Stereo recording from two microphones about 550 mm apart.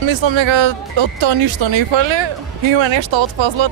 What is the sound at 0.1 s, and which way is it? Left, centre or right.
Speech, right.